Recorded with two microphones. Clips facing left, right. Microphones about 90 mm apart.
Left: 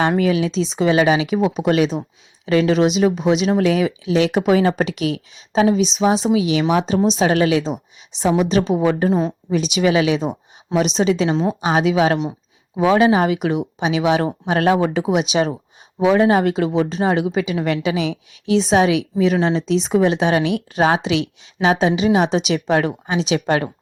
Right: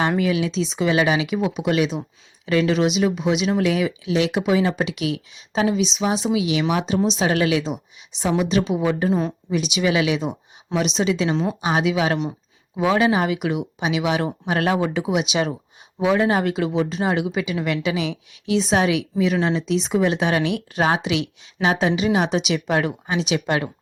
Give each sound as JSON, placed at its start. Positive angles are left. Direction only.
{"t": 0.2, "sound": "speech", "side_deg": 35}
{"t": 11.3, "sound": "a woman's voice", "side_deg": 25}
{"t": 11.7, "sound": "a woman's voice", "side_deg": 35}